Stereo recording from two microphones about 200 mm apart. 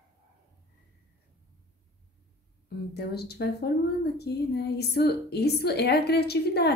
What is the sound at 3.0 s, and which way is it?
A woman's voice, 55° left (ahead or behind).